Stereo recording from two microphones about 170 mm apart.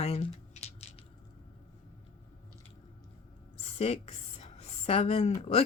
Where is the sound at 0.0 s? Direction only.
35° left (ahead or behind).